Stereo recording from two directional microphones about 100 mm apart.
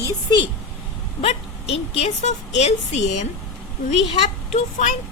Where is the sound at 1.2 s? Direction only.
90° left.